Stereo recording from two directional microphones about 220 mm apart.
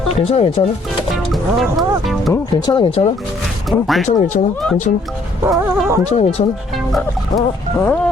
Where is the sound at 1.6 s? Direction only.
Centre (ahead or behind).